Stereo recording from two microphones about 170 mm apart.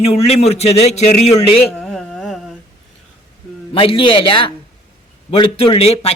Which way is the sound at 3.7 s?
30° left (ahead or behind).